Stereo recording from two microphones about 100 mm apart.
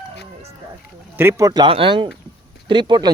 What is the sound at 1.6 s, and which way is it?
Speech, 60° right (ahead or behind).